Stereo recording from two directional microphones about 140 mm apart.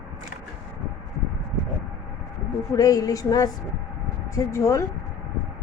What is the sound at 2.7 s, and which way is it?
A woman's voice, 25° left (ahead or behind).